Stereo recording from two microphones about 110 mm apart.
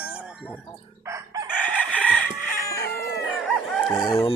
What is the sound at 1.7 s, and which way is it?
Chicken, 10° left (ahead or behind).